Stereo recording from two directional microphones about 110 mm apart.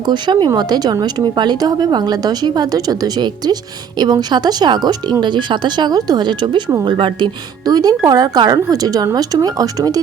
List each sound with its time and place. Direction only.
0.1 s speech: 45° right (ahead or behind)